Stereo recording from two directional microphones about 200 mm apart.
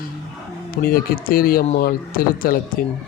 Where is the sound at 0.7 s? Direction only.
45° left (ahead or behind).